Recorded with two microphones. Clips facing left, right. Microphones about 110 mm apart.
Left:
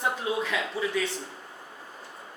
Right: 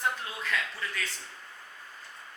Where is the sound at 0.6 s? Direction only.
15° left (ahead or behind).